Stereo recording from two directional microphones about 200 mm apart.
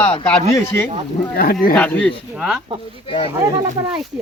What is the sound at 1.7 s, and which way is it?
Speech, 5° left (ahead or behind).